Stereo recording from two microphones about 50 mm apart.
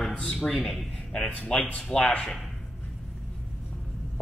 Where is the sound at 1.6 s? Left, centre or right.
Left.